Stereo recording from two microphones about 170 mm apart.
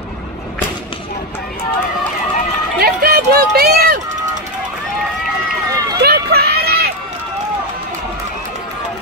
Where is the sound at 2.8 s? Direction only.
65° right (ahead or behind).